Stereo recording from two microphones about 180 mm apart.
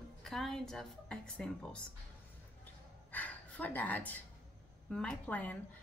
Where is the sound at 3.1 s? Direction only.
10° left (ahead or behind).